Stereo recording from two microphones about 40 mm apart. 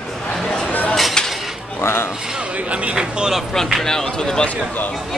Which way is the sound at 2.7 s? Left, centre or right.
Right.